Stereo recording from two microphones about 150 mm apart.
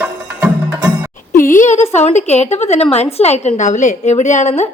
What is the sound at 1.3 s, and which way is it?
A woman's voice, 60° left (ahead or behind).